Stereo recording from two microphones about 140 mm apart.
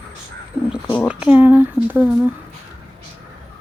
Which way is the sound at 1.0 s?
10° right (ahead or behind).